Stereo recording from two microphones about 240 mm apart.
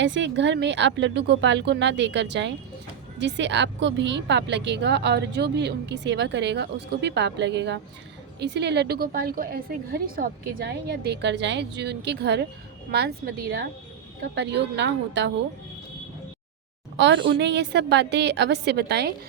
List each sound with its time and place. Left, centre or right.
0.0 s speech: right
17.0 s speech: right